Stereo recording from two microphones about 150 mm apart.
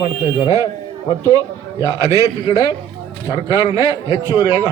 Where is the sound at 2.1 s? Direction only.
25° left (ahead or behind).